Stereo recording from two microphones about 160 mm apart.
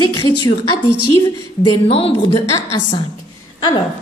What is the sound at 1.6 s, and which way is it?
Speech, 40° left (ahead or behind).